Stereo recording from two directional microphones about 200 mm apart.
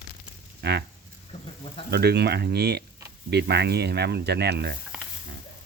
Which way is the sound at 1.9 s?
55° right (ahead or behind).